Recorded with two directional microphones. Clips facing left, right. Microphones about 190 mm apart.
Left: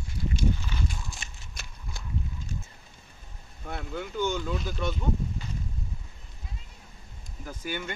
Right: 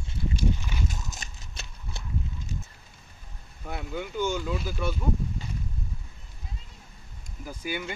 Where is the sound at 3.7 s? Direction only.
5° right (ahead or behind).